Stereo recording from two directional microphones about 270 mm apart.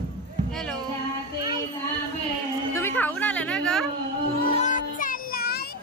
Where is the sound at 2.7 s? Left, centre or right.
Centre.